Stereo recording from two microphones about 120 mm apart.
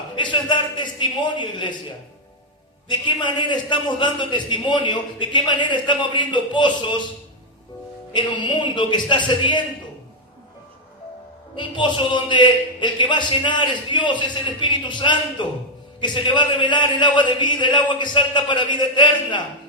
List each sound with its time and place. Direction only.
0.2 s a man's voice: 40° left (ahead or behind)
2.9 s a man's voice: 40° left (ahead or behind)
8.1 s a man's voice: 40° left (ahead or behind)
11.5 s a man's voice: 40° left (ahead or behind)